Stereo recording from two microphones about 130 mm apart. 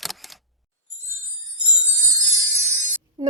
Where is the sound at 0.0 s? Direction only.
Centre (ahead or behind).